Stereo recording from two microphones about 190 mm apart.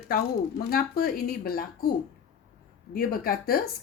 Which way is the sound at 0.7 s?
50° left (ahead or behind).